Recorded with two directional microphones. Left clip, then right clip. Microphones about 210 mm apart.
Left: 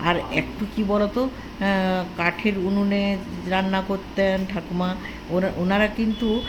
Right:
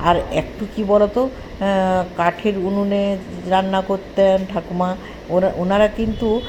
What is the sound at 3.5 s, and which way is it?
Speech, centre (ahead or behind).